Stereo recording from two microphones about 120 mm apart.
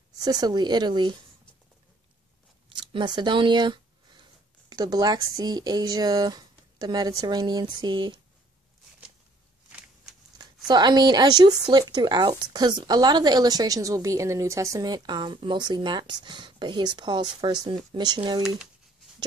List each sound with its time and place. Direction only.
0.2 s speech: 35° right (ahead or behind)
2.8 s speech: 40° right (ahead or behind)
10.3 s speech: 35° right (ahead or behind)